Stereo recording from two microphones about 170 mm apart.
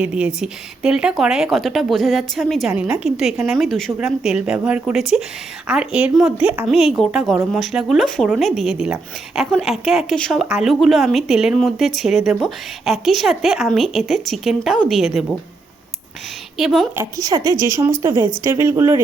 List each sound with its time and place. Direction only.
0.0 s a woman's voice: 5° right (ahead or behind)
16.6 s a woman's voice: centre (ahead or behind)
16.9 s speech: 20° right (ahead or behind)